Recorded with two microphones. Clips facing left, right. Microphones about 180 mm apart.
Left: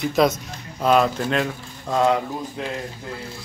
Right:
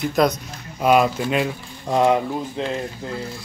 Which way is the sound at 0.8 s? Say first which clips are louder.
Right 1 dB; 10° right (ahead or behind).